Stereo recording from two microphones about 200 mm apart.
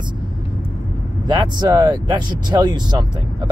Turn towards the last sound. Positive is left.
turn(degrees=-20)  # may be behind; listen again after turning